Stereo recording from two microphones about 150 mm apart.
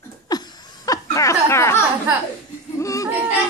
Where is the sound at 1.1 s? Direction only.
20° left (ahead or behind).